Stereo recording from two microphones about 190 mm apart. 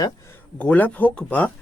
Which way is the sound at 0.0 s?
10° left (ahead or behind).